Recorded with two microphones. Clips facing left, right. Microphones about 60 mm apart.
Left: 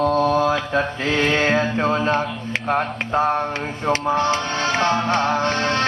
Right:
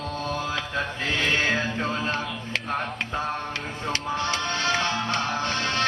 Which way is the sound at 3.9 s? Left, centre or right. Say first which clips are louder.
Left 9 dB; left.